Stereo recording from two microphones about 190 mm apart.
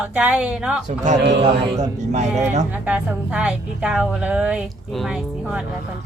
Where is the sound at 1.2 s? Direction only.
65° right (ahead or behind).